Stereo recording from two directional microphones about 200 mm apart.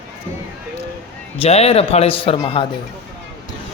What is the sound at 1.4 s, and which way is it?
A man's voice, 30° left (ahead or behind).